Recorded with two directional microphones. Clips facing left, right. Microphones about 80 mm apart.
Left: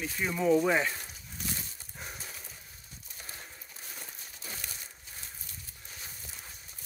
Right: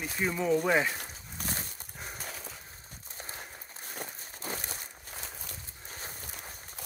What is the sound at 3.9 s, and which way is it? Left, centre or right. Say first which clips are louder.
Crumpling: right 9 dB; right.